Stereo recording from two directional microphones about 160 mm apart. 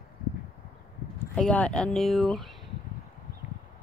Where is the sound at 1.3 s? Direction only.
5° left (ahead or behind).